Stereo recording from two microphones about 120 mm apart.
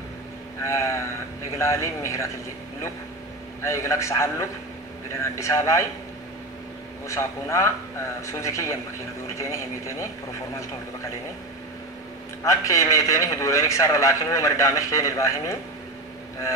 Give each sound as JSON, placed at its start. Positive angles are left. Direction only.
{"t": 0.7, "sound": "a sound", "side_deg": 25}
{"t": 1.6, "sound": "a man's voice", "side_deg": 25}
{"t": 3.6, "sound": "a man's voice", "side_deg": 25}
{"t": 7.1, "sound": "a man's voice", "side_deg": 25}
{"t": 12.4, "sound": "a man's voice", "side_deg": 25}